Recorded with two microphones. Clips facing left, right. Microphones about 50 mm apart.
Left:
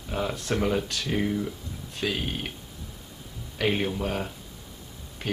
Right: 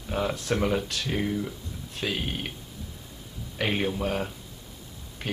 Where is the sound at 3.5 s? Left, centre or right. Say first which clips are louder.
Left 1 dB; centre.